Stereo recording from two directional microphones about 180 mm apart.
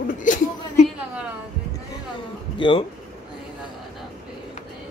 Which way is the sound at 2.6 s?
30° left (ahead or behind).